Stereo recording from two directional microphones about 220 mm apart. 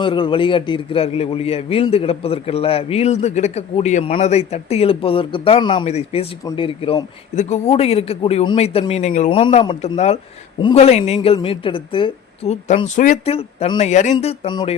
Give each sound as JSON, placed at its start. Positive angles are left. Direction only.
{"t": 0.0, "sound": "a man's voice", "side_deg": 20}